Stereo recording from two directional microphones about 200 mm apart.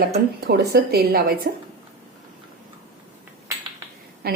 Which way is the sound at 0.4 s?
55° right (ahead or behind).